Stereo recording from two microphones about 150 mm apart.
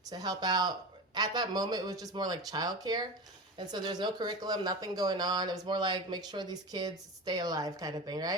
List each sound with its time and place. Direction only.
0.1 s speech: 25° right (ahead or behind)